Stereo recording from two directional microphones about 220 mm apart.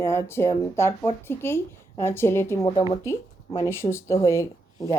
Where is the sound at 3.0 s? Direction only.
15° left (ahead or behind).